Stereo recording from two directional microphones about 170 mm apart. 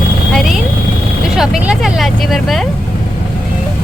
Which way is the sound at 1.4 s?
5° right (ahead or behind).